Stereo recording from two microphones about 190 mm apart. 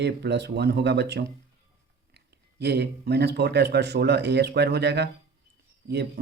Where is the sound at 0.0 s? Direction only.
60° right (ahead or behind).